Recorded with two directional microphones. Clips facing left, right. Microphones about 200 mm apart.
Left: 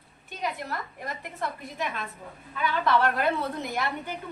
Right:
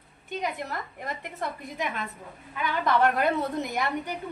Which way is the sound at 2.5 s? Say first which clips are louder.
Left 1 dB; 15° right (ahead or behind).